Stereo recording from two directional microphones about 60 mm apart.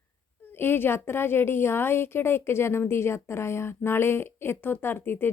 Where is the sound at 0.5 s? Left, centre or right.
Left.